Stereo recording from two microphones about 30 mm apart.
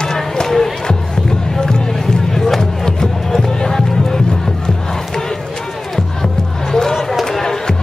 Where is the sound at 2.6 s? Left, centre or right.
Centre.